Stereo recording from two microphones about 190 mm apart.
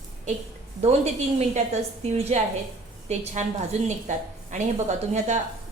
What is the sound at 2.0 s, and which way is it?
A woman's voice, 35° right (ahead or behind).